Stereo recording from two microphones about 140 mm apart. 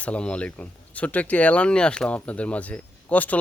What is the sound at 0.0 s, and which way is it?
Speech, 10° left (ahead or behind).